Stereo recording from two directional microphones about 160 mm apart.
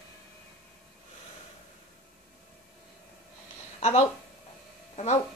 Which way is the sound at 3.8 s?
45° left (ahead or behind).